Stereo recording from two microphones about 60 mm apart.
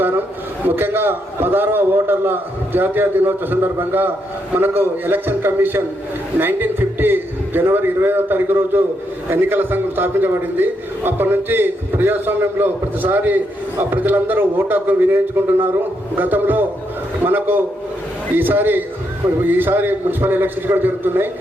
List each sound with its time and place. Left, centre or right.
0.8 s a man's voice: right